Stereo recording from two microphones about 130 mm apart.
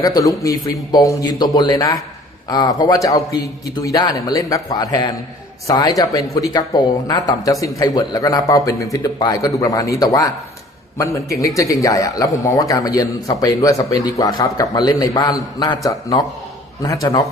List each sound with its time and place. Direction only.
0.0 s a man's voice: 25° left (ahead or behind)